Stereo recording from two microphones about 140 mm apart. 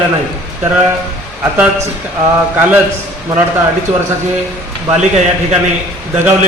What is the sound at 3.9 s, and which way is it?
Speech, 50° right (ahead or behind).